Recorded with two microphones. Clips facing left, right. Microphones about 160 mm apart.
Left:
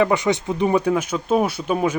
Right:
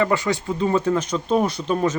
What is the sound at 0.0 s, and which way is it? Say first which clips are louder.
Speech: left 2 dB; 20° left (ahead or behind).